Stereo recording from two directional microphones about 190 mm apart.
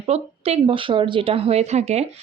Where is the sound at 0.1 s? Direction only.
35° right (ahead or behind).